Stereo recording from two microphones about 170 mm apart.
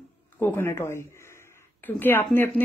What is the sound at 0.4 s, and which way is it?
Speech, 15° left (ahead or behind).